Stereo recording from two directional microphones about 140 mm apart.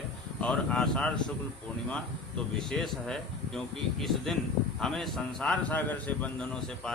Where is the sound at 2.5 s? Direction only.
5° left (ahead or behind).